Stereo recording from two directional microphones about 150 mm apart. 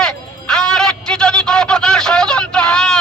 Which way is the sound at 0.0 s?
5° left (ahead or behind).